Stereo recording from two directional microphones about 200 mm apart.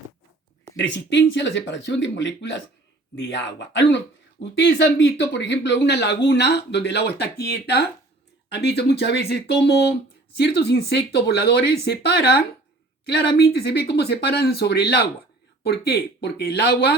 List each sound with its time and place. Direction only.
0.7 s speech: 65° left (ahead or behind)